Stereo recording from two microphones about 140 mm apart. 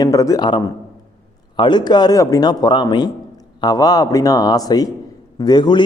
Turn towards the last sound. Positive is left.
turn(degrees=30)  # may be behind; listen again after turning